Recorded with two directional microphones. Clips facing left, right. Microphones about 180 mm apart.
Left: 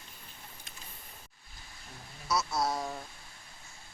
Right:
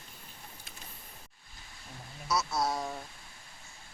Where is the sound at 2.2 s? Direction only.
Centre (ahead or behind).